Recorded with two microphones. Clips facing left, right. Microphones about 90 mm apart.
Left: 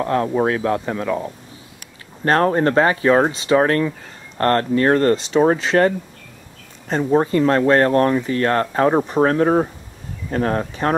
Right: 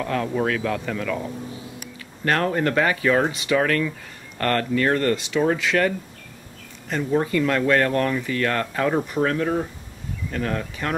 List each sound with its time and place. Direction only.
0.0 s speech: 30° left (ahead or behind)